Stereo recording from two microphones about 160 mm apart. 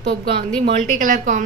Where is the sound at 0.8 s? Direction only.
55° right (ahead or behind).